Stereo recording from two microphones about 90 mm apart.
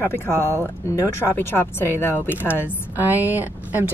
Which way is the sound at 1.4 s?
25° left (ahead or behind).